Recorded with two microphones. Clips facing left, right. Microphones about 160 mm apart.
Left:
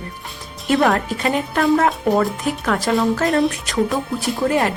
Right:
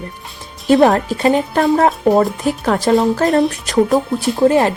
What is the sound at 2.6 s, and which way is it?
Speech, 25° right (ahead or behind).